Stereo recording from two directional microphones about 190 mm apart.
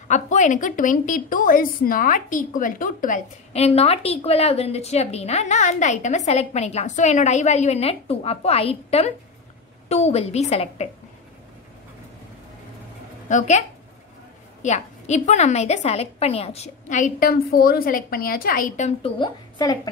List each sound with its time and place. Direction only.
0.1 s a woman's voice: 40° left (ahead or behind)
13.3 s a woman's voice: 40° left (ahead or behind)
19.0 s a woman's voice: 25° left (ahead or behind)